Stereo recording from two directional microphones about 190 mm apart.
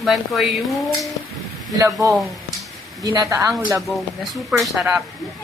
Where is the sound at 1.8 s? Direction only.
15° right (ahead or behind).